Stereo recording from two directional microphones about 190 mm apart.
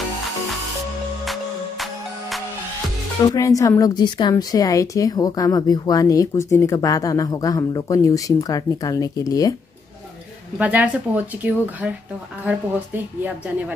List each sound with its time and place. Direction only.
1.2 s music: centre (ahead or behind)
3.3 s a woman's voice: 15° left (ahead or behind)
10.6 s speech: 10° right (ahead or behind)